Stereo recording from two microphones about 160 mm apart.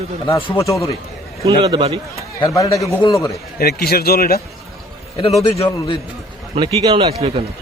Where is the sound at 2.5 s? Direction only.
20° left (ahead or behind).